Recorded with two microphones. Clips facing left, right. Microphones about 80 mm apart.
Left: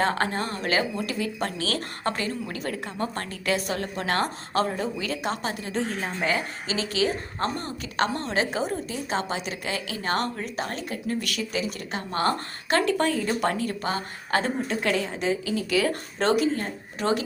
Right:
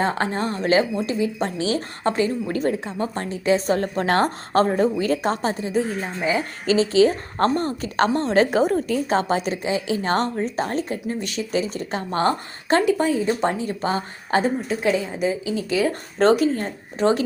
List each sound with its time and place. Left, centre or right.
0.0 s speech: right
2.5 s speech: right
2.7 s speech: right
3.7 s speech: right
5.7 s a woman's voice: centre
6.7 s speech: right
7.3 s speech: right
8.4 s a woman's voice: right
9.6 s speech: right
12.8 s speech: centre
14.8 s a woman's voice: centre
15.4 s speech: right
16.1 s speech: right